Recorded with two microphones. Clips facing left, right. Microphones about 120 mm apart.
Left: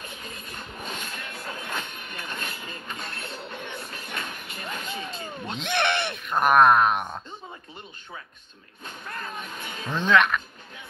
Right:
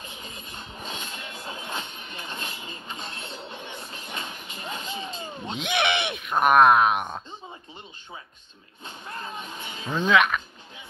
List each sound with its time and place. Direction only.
0.2 s vehicle: 50° left (ahead or behind)
1.1 s a sound: 20° right (ahead or behind)
1.9 s a sound: 50° left (ahead or behind)
2.2 s music: 20° right (ahead or behind)
3.3 s train: 20° right (ahead or behind)
3.7 s vehicle: 25° right (ahead or behind)
4.6 s a sound: 25° right (ahead or behind)
5.6 s speech: centre (ahead or behind)
8.8 s speech: 25° right (ahead or behind)
9.8 s speech: 5° right (ahead or behind)